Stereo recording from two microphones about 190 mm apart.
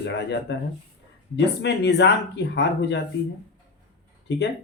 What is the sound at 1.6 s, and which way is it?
Speech, 65° left (ahead or behind).